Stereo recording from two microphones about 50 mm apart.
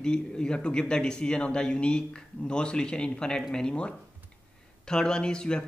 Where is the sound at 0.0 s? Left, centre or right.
Centre.